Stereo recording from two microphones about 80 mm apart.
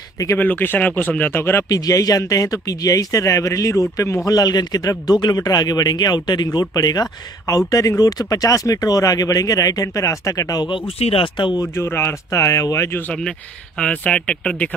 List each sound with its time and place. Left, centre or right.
0.4 s speech: left
1.7 s speech: left
4.3 s speech: left
6.6 s speech: left
11.7 s speech: left
13.7 s speech: centre